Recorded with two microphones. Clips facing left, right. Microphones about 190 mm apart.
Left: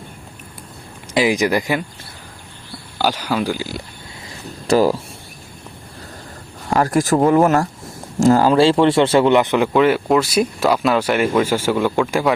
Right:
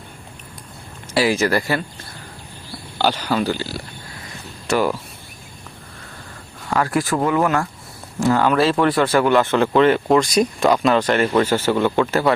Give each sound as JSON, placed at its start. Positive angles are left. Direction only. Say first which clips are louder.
{"t": 1.1, "sound": "speech", "louder": "left 1 dB", "side_deg": 15}
{"t": 3.0, "sound": "speech", "louder": "even", "side_deg": 10}
{"t": 4.6, "sound": "speech", "louder": "left 5 dB", "side_deg": 35}
{"t": 6.7, "sound": "speech", "louder": "left 4 dB", "side_deg": 40}
{"t": 8.4, "sound": "speech", "louder": "left 4 dB", "side_deg": 25}